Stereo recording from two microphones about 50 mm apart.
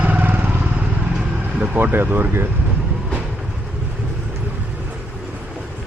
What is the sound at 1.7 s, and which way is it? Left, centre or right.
Speech, right.